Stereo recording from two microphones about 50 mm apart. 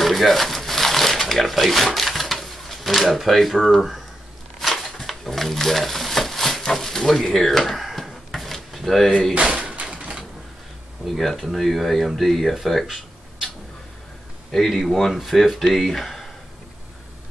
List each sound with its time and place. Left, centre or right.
0.0 s crumpling: centre
4.6 s a sound: centre
9.3 s door: right
11.1 s speech: centre
14.5 s speech: centre